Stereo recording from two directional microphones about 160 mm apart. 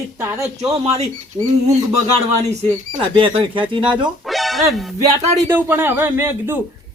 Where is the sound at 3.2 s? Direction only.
30° right (ahead or behind).